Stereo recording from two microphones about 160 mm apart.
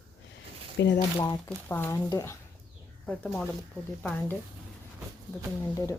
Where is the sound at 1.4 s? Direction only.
15° left (ahead or behind).